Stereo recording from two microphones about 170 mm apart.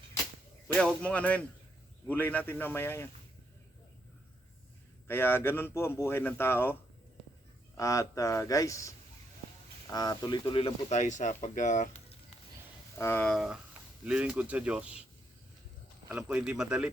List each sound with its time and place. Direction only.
0.8 s speech: 5° left (ahead or behind)
5.0 s speech: 15° left (ahead or behind)
7.8 s speech: 20° left (ahead or behind); by 12.1 s 40° left (ahead or behind)
13.0 s speech: 15° left (ahead or behind)
13.2 s speech: centre (ahead or behind)
16.1 s speech: 5° right (ahead or behind)